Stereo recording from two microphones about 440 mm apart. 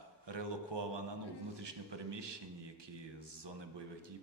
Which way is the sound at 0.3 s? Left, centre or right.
Right.